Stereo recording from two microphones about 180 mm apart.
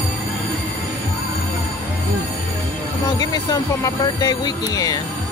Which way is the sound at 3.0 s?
20° left (ahead or behind).